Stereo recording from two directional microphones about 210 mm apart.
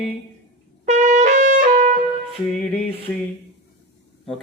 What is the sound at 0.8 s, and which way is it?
Trumpet, 35° right (ahead or behind).